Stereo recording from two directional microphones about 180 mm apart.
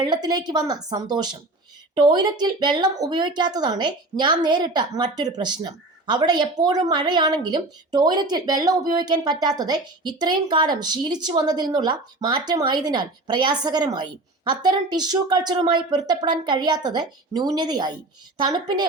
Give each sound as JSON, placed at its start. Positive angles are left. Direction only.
{"t": 0.0, "sound": "speech", "side_deg": -25}